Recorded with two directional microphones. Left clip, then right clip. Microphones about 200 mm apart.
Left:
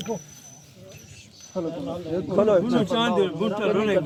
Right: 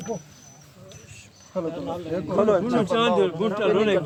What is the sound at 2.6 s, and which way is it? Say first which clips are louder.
A man's voice: right 2 dB; 40° right (ahead or behind).